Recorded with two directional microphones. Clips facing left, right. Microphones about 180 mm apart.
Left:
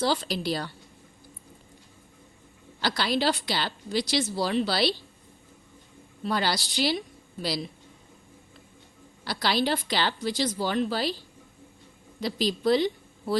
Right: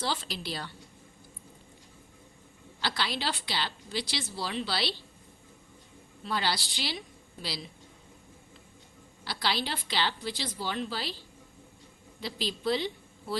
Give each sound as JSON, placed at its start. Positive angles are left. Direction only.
{"t": 0.0, "sound": "speech", "side_deg": 40}
{"t": 2.8, "sound": "a woman's voice", "side_deg": 40}
{"t": 6.2, "sound": "a woman's voice", "side_deg": 45}
{"t": 9.2, "sound": "a woman's voice", "side_deg": 45}
{"t": 12.2, "sound": "a woman's voice", "side_deg": 45}